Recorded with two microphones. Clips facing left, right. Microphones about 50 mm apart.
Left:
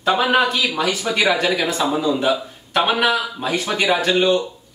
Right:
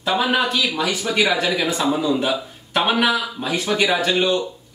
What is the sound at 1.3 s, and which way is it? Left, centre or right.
Speech, centre.